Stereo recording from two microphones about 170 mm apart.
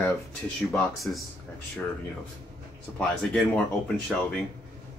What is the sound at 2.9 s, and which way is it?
Speech, 5° left (ahead or behind).